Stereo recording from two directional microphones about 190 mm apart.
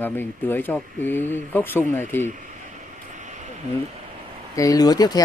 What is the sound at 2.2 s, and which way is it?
Speech, 40° right (ahead or behind).